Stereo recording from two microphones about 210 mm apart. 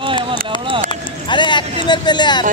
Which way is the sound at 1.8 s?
20° left (ahead or behind).